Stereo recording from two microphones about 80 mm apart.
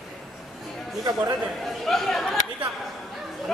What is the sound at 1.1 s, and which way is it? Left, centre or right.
Speech, right.